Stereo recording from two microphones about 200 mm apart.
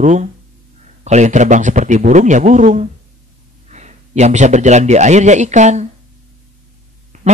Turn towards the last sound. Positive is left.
turn(degrees=-35)  # may be behind; listen again after turning